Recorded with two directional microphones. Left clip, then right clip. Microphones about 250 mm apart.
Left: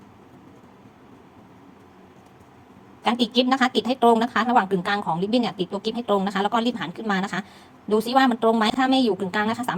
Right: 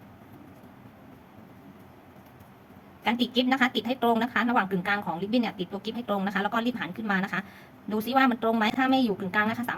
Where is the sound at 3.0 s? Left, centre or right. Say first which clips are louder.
Left 5 dB; centre.